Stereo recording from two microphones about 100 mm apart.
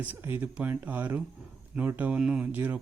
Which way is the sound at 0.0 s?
20° right (ahead or behind).